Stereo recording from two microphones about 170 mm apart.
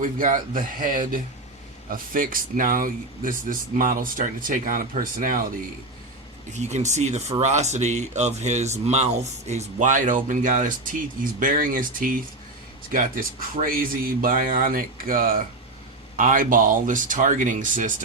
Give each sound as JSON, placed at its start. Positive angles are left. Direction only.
{"t": 0.0, "sound": "speech", "side_deg": -50}
{"t": 6.5, "sound": "speech", "side_deg": -40}